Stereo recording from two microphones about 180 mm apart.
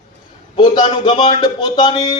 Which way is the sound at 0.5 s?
25° left (ahead or behind).